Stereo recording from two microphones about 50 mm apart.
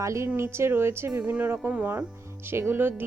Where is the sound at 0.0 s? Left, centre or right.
Right.